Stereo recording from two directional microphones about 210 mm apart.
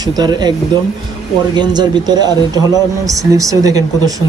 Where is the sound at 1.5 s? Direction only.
20° right (ahead or behind).